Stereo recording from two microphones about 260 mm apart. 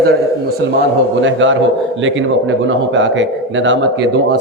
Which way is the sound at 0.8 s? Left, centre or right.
Right.